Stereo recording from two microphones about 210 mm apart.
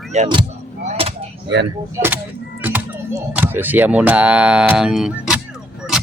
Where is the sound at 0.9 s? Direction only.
30° right (ahead or behind).